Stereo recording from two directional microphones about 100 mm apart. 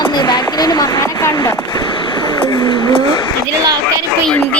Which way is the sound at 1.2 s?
35° left (ahead or behind).